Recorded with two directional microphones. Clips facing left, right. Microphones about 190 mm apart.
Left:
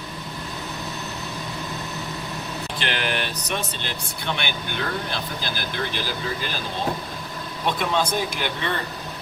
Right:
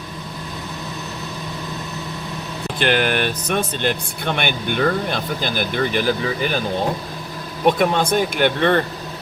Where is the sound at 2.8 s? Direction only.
55° right (ahead or behind).